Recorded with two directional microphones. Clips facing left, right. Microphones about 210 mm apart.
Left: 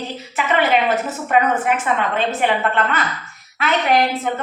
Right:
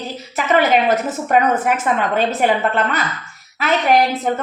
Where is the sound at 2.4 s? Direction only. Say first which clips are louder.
Right 2 dB; 40° right (ahead or behind).